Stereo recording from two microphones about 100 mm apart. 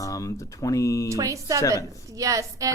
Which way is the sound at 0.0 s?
35° left (ahead or behind).